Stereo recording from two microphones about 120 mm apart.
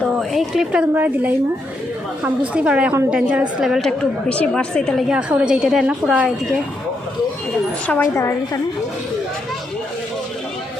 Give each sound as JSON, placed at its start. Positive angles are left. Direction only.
{"t": 0.1, "sound": "a woman's voice", "side_deg": 0}
{"t": 2.5, "sound": "a woman's voice", "side_deg": -10}
{"t": 8.0, "sound": "a woman's voice", "side_deg": 25}